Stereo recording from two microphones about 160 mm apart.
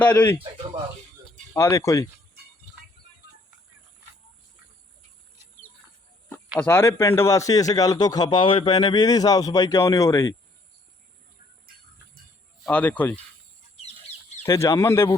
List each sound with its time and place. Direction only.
0.0 s speech: 10° left (ahead or behind)
1.5 s a man's voice: 20° left (ahead or behind)
6.6 s a man's voice: 15° left (ahead or behind)
12.6 s speech: 10° left (ahead or behind)
13.8 s bird: 45° left (ahead or behind)
14.4 s a man's voice: 20° left (ahead or behind)